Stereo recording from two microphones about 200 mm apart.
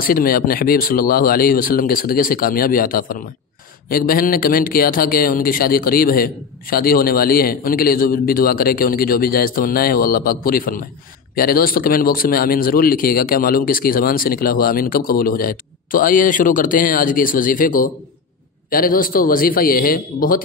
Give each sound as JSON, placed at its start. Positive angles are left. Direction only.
{"t": 0.0, "sound": "speech", "side_deg": 45}